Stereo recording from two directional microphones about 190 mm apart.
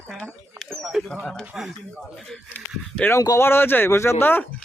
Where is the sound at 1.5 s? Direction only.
Centre (ahead or behind).